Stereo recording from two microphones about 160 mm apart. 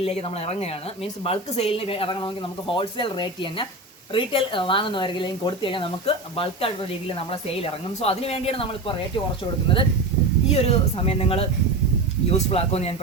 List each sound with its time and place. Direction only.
0.0 s speech: 40° left (ahead or behind)
10.5 s speech: 40° left (ahead or behind)